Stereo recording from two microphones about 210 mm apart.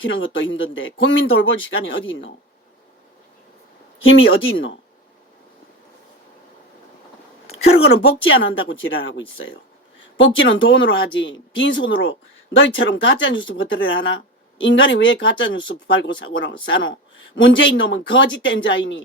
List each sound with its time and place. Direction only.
0.0 s speech: 65° left (ahead or behind)
4.0 s speech: 70° left (ahead or behind)
7.4 s a woman's voice: 30° left (ahead or behind)
8.8 s speech: 65° left (ahead or behind)